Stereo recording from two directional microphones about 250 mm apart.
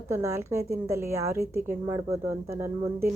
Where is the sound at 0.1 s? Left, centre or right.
Centre.